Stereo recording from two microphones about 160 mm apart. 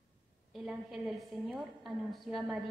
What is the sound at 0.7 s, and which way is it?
A woman's voice, centre (ahead or behind).